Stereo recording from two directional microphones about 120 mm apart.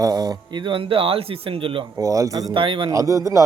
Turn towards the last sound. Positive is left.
turn(degrees=-25)  # may be behind; listen again after turning